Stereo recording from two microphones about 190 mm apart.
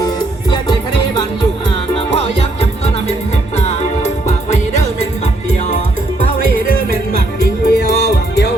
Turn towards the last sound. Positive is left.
turn(degrees=55)  # may be behind; listen again after turning